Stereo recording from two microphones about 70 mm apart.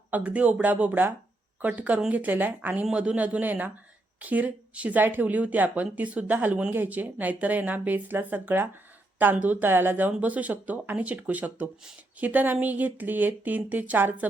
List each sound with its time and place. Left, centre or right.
0.1 s a woman's voice: centre
2.8 s a woman's voice: centre